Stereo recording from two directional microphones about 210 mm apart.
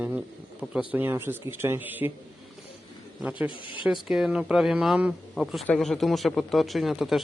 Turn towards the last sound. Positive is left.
turn(degrees=0)  # may be behind; listen again after turning